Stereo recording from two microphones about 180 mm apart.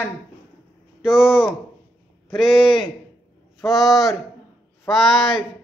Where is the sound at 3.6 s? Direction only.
Centre (ahead or behind).